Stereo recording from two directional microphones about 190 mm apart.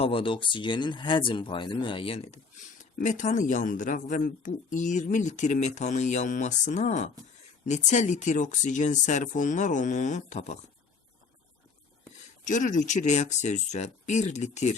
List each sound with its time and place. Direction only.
0.0 s speech: 30° left (ahead or behind)
12.5 s speech: 40° left (ahead or behind)